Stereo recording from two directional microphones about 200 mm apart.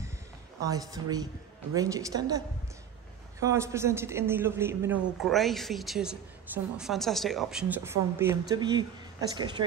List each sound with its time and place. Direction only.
0.6 s a woman's voice: 15° right (ahead or behind)
5.2 s a woman's voice: centre (ahead or behind); by 8.8 s 20° right (ahead or behind)